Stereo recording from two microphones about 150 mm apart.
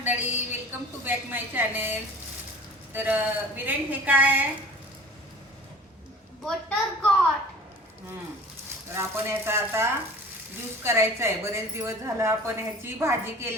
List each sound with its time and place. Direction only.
0.0 s a woman's voice: 10° right (ahead or behind)
6.4 s a child's voice: 5° left (ahead or behind)
8.9 s a woman's voice: 15° right (ahead or behind)